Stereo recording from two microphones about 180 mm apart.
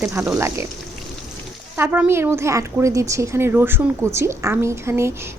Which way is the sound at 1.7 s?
10° right (ahead or behind).